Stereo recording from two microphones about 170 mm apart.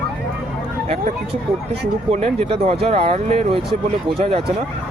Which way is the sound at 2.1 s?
40° right (ahead or behind).